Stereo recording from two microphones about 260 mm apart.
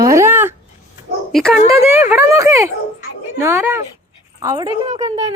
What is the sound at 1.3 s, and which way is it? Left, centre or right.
Speech, centre.